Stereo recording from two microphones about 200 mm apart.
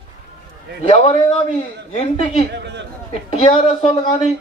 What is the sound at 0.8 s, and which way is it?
A man's voice, 30° left (ahead or behind).